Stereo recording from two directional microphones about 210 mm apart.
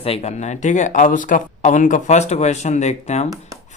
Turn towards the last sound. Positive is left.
turn(degrees=30)  # may be behind; listen again after turning